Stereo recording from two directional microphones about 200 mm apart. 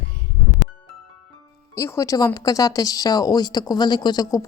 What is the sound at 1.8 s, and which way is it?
Speech, 15° left (ahead or behind).